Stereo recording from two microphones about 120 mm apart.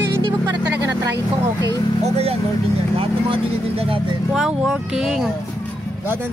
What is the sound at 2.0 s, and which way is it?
Speech, 60° right (ahead or behind).